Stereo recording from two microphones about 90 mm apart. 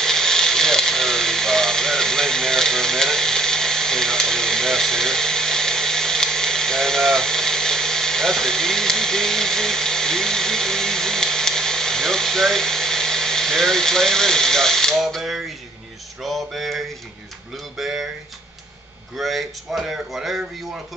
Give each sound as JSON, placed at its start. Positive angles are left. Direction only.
{"t": 0.0, "sound": "a sound", "side_deg": 5}
{"t": 16.2, "sound": "speech", "side_deg": 0}
{"t": 19.1, "sound": "speech", "side_deg": 0}